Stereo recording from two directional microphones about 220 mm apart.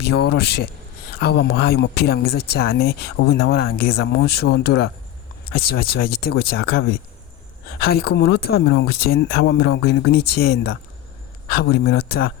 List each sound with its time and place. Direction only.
0.0 s speech: 50° left (ahead or behind)